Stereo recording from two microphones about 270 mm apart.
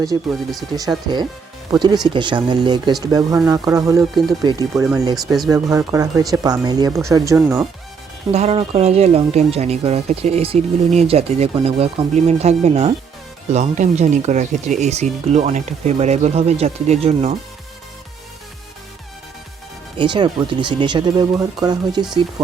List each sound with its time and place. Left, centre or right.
0.1 s speech: centre
3.9 s speech: centre
4.8 s speech: centre
5.1 s speech: centre
5.5 s speech: centre
8.3 s speech: right
20.0 s speech: centre